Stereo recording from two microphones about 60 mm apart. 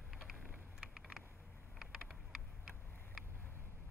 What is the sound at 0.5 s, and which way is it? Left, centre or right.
Vehicle, centre.